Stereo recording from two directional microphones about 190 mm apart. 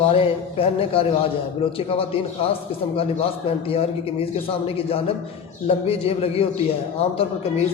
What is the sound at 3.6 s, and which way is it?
A man's voice, 30° left (ahead or behind).